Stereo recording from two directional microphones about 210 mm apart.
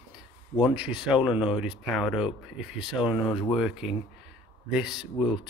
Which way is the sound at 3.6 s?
Centre (ahead or behind).